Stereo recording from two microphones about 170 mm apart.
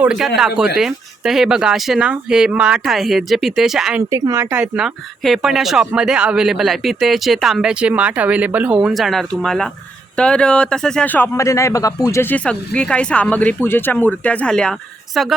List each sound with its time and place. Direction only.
0.0 s speech: centre (ahead or behind)
4.1 s speech: 15° right (ahead or behind)
4.5 s speech: 5° right (ahead or behind)